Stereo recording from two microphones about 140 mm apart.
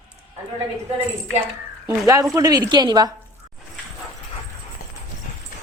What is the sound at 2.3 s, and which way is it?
Speech, 25° right (ahead or behind).